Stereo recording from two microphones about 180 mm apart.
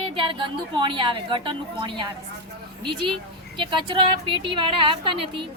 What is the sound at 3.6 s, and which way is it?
A woman's voice, 25° right (ahead or behind).